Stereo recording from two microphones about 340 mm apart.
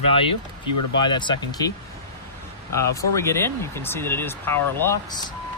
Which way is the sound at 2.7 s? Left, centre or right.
Centre.